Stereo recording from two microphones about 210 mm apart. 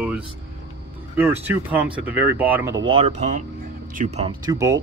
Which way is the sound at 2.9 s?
30° right (ahead or behind).